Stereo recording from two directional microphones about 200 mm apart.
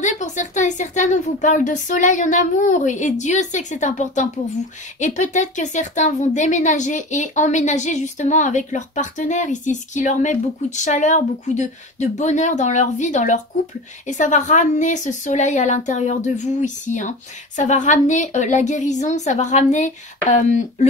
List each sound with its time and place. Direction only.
0.0 s speech: 35° left (ahead or behind)